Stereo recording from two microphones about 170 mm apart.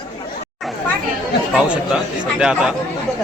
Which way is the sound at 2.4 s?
5° right (ahead or behind).